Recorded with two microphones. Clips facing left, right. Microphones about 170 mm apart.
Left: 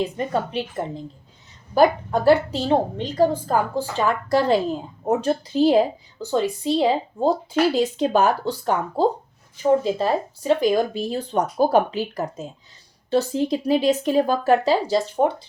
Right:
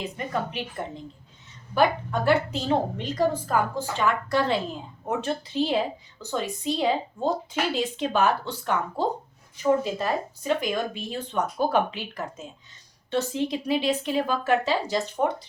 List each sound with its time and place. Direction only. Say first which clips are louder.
0.0 s a woman's voice: left 6 dB; 30° left (ahead or behind)
1.7 s a woman's voice: left 5 dB; 35° left (ahead or behind)